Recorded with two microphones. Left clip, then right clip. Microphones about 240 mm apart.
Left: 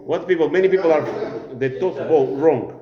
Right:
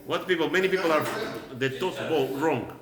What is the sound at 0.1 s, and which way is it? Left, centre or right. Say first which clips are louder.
Speech: left 7 dB; centre.